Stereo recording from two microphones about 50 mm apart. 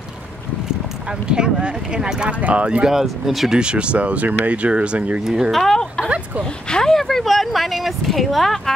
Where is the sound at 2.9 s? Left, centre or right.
Centre.